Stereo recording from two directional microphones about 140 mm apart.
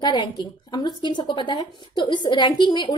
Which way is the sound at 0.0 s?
30° left (ahead or behind).